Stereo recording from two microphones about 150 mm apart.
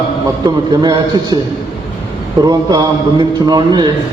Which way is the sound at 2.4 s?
25° right (ahead or behind).